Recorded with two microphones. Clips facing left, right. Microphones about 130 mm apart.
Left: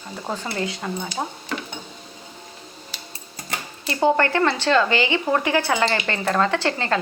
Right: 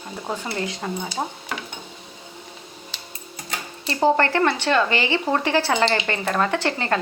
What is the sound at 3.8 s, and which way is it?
Speech, 30° right (ahead or behind).